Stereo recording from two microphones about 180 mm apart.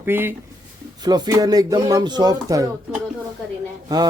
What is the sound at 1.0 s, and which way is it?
Speech, 25° right (ahead or behind).